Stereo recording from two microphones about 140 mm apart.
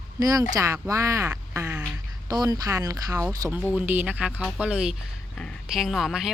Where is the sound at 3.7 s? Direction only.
10° right (ahead or behind).